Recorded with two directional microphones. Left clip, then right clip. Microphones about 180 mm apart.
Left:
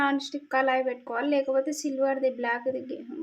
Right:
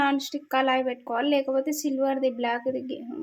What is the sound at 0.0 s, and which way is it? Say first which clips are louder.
A woman's voice: right 2 dB; 15° right (ahead or behind).